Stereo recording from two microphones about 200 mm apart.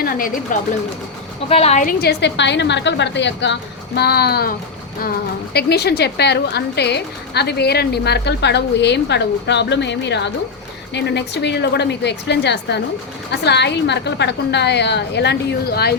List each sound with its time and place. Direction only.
0.0 s a sound: 45° left (ahead or behind)
0.5 s speech: 40° left (ahead or behind)
1.5 s a woman's voice: 30° left (ahead or behind); by 4.5 s 50° left (ahead or behind)
5.5 s a woman's voice: 55° left (ahead or behind)